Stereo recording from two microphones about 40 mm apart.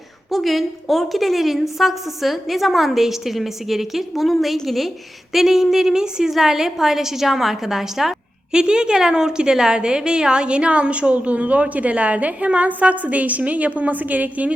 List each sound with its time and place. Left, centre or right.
0.3 s a woman's voice: centre
8.5 s a woman's voice: right